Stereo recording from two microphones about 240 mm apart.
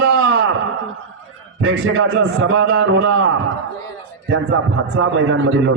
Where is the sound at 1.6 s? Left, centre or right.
Right.